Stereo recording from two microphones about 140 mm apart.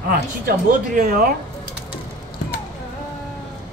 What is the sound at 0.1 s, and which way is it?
Speech, 90° right.